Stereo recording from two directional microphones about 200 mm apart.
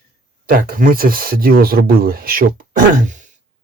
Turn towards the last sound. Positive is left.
turn(degrees=-40)  # may be behind; listen again after turning